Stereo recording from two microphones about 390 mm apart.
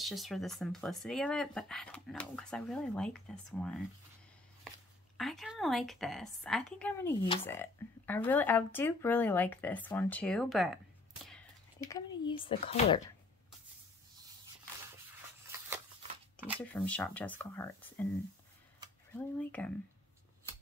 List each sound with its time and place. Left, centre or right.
0.0 s a woman's voice: centre
5.1 s a woman's voice: centre
16.3 s a woman's voice: centre
19.1 s a woman's voice: centre